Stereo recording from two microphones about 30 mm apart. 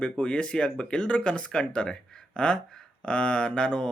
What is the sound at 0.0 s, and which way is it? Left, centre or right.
Speech, left.